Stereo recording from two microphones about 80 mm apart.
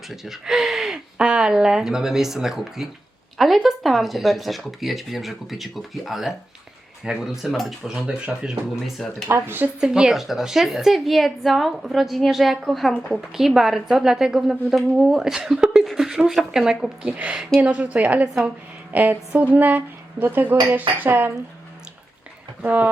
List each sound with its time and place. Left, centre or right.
0.1 s a woman's voice: centre
9.2 s speech: right
9.8 s a woman's voice: centre; by 21.3 s right
22.6 s speech: centre